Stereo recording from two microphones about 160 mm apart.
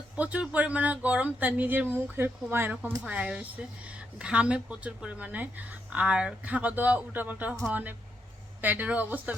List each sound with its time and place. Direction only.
0.2 s speech: 10° right (ahead or behind)